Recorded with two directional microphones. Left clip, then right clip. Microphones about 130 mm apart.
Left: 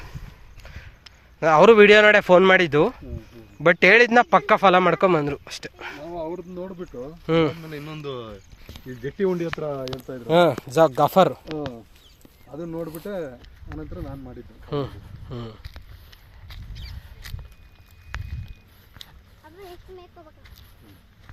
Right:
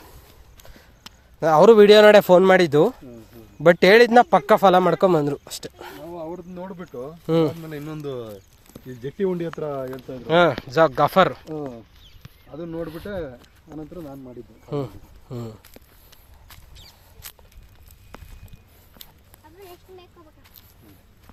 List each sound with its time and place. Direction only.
0.5 s run: 45° right (ahead or behind)
1.4 s a man's voice: 45° right (ahead or behind)
5.8 s a sound: 50° right (ahead or behind)
7.3 s speech: 40° right (ahead or behind)
8.9 s speech: 30° right (ahead or behind)
9.5 s speech: 20° left (ahead or behind)
12.5 s speech: 10° left (ahead or behind)
12.8 s speech: 35° left (ahead or behind)
13.1 s speech: 20° left (ahead or behind)
14.7 s speech: 20° right (ahead or behind)
15.3 s speech: 45° right (ahead or behind)